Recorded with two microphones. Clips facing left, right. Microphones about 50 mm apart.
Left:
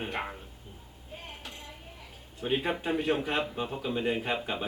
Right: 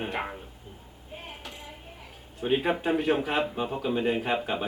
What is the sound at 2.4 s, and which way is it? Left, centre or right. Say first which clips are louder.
A man's voice: right 4 dB; centre.